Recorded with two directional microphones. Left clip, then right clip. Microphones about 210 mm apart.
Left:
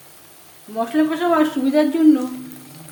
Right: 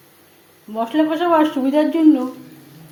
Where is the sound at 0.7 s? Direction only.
Centre (ahead or behind).